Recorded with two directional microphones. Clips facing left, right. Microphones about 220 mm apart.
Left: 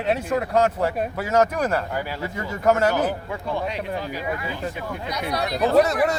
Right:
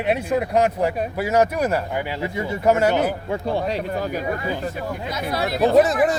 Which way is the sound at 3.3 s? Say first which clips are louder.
Right 4 dB; 35° right (ahead or behind).